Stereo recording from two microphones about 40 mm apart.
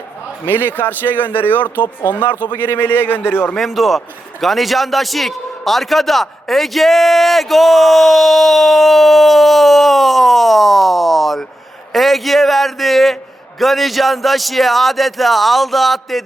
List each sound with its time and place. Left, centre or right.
0.4 s speech: left
3.7 s a man's voice: centre